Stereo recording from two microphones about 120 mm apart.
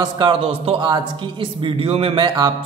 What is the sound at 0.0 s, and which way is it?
Speech, 45° right (ahead or behind).